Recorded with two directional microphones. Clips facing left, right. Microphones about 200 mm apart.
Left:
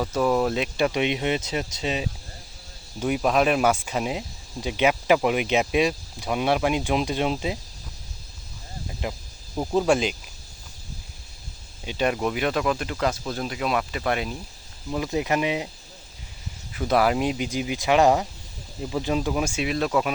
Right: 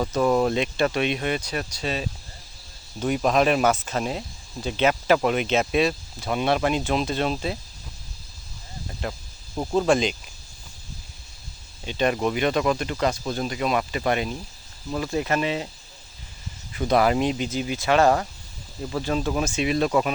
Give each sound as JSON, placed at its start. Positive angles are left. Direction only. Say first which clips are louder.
{"t": 0.1, "sound": "speech", "louder": "right 1 dB", "side_deg": 0}
{"t": 3.0, "sound": "speech", "louder": "right 1 dB", "side_deg": 5}
{"t": 8.9, "sound": "a sound", "louder": "even", "side_deg": 10}
{"t": 9.6, "sound": "speech", "louder": "even", "side_deg": 10}
{"t": 11.9, "sound": "speech", "louder": "right 1 dB", "side_deg": 5}
{"t": 14.8, "sound": "speech", "louder": "even", "side_deg": 10}
{"t": 16.7, "sound": "speech", "louder": "right 1 dB", "side_deg": 0}